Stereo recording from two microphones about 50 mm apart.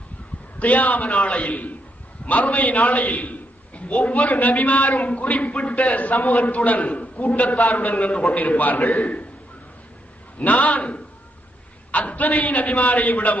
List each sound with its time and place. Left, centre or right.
0.6 s a man's voice: left
10.4 s a man's voice: left